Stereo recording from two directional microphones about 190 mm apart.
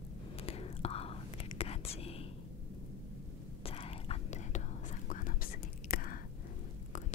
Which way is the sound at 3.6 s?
30° left (ahead or behind).